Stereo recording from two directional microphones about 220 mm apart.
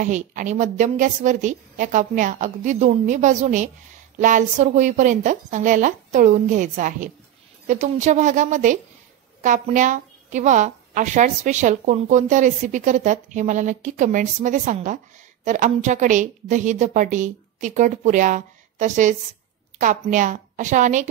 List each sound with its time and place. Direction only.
0.0 s a woman's voice: 35° right (ahead or behind)